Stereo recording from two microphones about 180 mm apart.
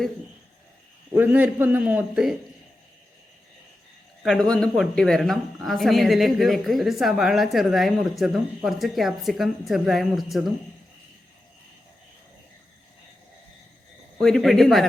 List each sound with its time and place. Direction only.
1.1 s a man's voice: 10° right (ahead or behind)
4.2 s speech: centre (ahead or behind)
14.2 s speech: centre (ahead or behind)